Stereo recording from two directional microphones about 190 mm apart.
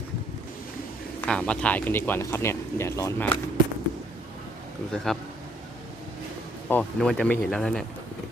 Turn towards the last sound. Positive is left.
turn(degrees=5)  # may be behind; listen again after turning